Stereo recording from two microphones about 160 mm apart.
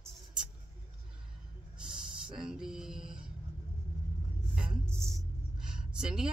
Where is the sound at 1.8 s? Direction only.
30° right (ahead or behind).